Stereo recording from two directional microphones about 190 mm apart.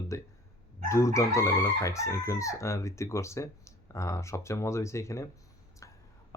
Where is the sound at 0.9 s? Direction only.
15° left (ahead or behind).